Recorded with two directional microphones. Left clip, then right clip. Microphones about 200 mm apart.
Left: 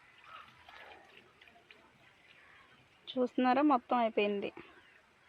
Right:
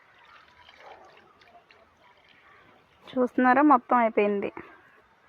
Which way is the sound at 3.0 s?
15° right (ahead or behind).